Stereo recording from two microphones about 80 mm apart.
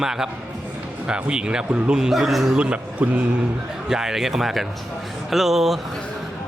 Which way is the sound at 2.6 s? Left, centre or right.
Centre.